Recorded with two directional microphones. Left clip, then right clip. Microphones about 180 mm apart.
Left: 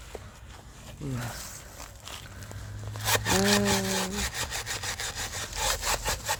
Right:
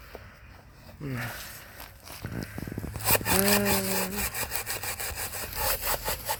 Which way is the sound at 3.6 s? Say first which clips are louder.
Left 1 dB; 40° right (ahead or behind).